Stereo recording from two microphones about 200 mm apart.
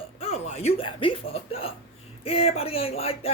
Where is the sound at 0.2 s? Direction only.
30° left (ahead or behind).